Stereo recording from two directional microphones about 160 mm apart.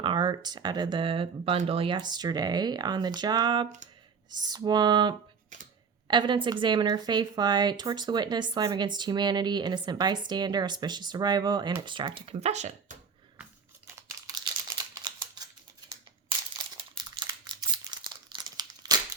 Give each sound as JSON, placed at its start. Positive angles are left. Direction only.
{"t": 0.0, "sound": "a woman's voice", "side_deg": -30}
{"t": 13.4, "sound": "a sound", "side_deg": -15}
{"t": 17.0, "sound": "crumpling", "side_deg": -30}